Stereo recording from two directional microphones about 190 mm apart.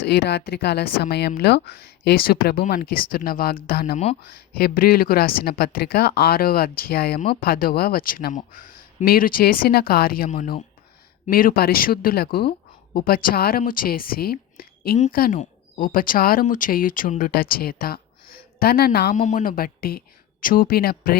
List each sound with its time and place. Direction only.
0.0 s speech: 60° left (ahead or behind)
3.9 s speech: 35° left (ahead or behind)
4.3 s speech: 55° left (ahead or behind)